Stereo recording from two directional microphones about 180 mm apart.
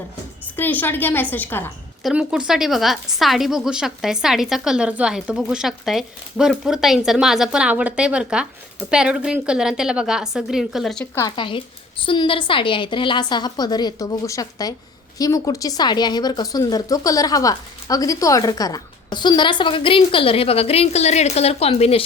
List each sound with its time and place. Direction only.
0.5 s a woman's voice: 10° left (ahead or behind)
2.0 s a woman's voice: 5° right (ahead or behind); by 22.0 s 35° left (ahead or behind)